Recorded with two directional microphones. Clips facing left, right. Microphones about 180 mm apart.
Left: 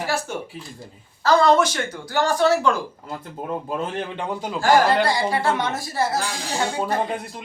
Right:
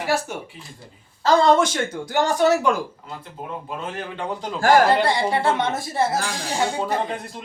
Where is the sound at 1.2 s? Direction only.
25° right (ahead or behind).